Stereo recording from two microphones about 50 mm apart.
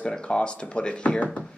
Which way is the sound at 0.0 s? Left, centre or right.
Centre.